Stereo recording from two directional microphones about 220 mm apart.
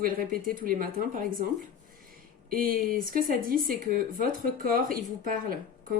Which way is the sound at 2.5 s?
40° right (ahead or behind).